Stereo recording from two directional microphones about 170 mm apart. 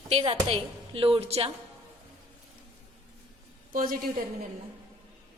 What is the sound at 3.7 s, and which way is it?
Speech, 55° right (ahead or behind).